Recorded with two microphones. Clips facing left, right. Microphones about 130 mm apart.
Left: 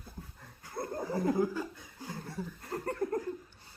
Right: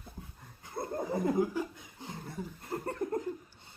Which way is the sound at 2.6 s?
25° right (ahead or behind).